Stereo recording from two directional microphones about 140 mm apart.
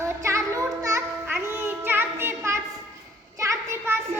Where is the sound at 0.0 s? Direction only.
20° right (ahead or behind).